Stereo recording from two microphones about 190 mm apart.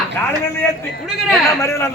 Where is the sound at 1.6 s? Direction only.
15° left (ahead or behind).